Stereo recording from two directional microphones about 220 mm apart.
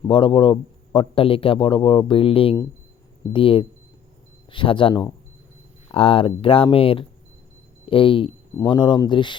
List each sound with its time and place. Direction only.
0.1 s speech: 20° left (ahead or behind)